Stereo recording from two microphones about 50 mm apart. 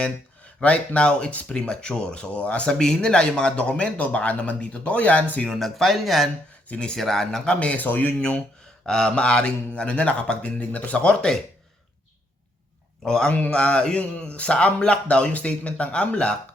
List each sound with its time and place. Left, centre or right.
0.0 s a man's voice: left
5.5 s speech: centre
6.7 s a man's voice: left
6.9 s speech: centre; by 7.8 s left
7.8 s a man's voice: left
8.2 s a man's voice: centre
13.0 s speech: centre
13.3 s a man's voice: left